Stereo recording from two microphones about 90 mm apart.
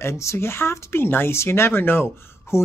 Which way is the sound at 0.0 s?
30° left (ahead or behind).